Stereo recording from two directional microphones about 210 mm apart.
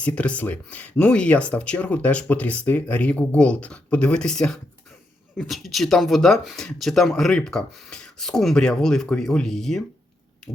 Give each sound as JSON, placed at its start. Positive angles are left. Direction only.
{"t": 0.0, "sound": "speech", "side_deg": 5}